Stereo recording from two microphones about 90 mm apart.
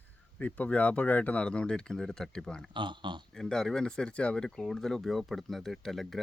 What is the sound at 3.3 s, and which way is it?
Speech, 5° left (ahead or behind).